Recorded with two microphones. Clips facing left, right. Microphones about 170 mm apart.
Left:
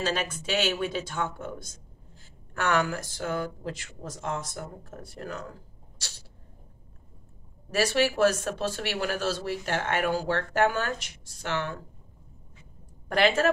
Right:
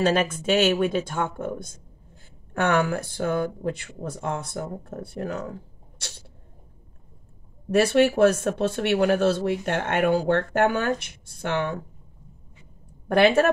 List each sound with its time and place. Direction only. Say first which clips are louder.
0.0 s speech: right 8 dB; 55° right (ahead or behind)
7.7 s speech: right 6 dB; 60° right (ahead or behind)
13.1 s speech: right 5 dB; 60° right (ahead or behind)